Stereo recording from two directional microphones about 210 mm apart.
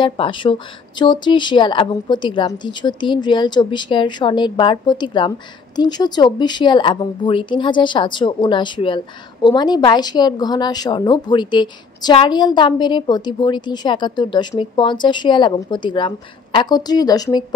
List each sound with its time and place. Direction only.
0.0 s speech: 25° left (ahead or behind)